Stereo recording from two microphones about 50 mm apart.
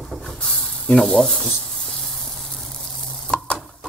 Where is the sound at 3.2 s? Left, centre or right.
Centre.